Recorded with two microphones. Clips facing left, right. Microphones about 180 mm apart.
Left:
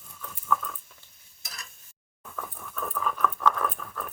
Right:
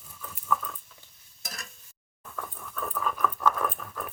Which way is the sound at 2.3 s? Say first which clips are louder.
Even; centre (ahead or behind).